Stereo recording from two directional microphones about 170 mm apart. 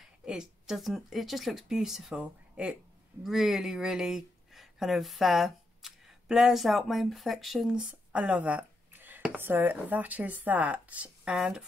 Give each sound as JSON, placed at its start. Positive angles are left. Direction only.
{"t": 0.0, "sound": "speech", "side_deg": -5}